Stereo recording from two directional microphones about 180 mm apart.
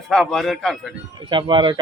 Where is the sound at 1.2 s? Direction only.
25° right (ahead or behind).